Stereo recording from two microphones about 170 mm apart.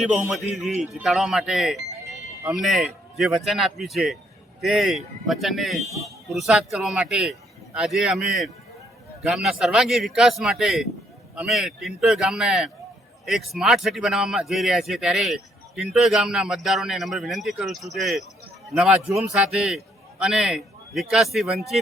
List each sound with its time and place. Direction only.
0.0 s speech: 5° right (ahead or behind)